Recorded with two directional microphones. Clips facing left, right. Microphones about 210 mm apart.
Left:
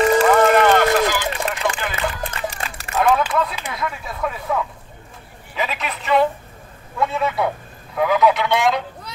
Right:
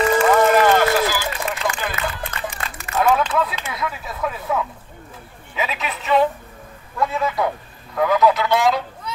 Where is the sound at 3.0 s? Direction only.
Centre (ahead or behind).